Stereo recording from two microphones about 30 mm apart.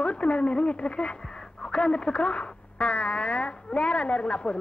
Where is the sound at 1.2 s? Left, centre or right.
Left.